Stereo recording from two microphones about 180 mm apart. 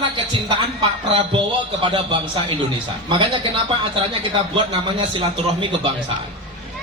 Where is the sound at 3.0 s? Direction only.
25° right (ahead or behind).